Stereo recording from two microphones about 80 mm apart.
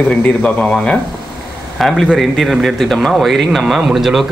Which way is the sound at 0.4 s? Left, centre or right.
Centre.